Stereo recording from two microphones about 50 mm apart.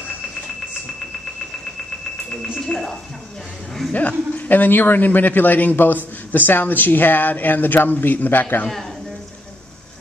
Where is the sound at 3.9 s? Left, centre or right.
Left.